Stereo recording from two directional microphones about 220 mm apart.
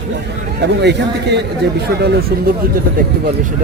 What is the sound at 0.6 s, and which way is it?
Speech, 50° right (ahead or behind).